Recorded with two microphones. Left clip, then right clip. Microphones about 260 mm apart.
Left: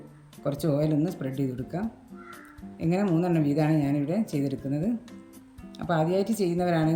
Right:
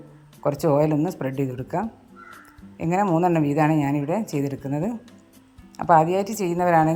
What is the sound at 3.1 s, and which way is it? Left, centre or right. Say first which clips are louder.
Speech: right 6 dB; centre.